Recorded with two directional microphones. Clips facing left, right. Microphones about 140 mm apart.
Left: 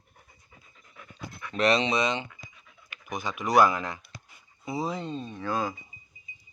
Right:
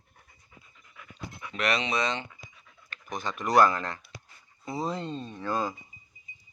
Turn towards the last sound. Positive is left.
turn(degrees=5)  # may be behind; listen again after turning